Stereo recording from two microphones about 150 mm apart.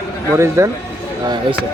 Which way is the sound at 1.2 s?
30° right (ahead or behind).